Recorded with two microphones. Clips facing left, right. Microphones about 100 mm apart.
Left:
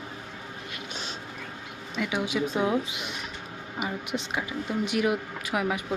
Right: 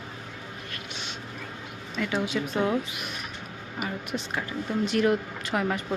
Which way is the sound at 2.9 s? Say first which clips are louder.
Even; 20° left (ahead or behind).